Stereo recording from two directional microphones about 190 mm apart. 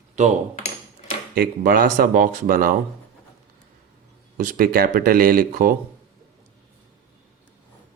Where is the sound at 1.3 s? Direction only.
50° right (ahead or behind).